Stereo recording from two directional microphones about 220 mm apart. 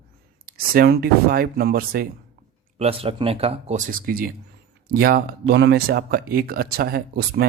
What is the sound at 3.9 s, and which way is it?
Speech, 40° right (ahead or behind).